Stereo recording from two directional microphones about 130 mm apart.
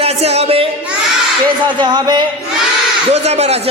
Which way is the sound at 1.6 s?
35° right (ahead or behind).